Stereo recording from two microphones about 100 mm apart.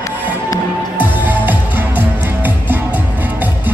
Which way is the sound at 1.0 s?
20° right (ahead or behind).